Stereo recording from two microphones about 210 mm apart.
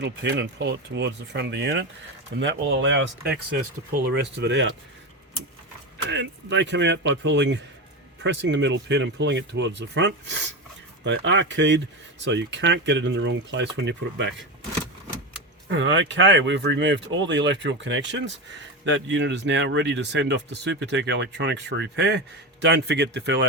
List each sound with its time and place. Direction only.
0.0 s speech: 55° right (ahead or behind)
6.1 s speech: 60° right (ahead or behind)
15.7 s speech: 65° right (ahead or behind)